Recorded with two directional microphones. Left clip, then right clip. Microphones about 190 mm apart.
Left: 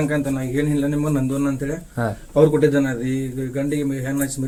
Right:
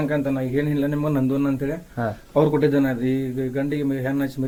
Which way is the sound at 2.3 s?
50° right (ahead or behind).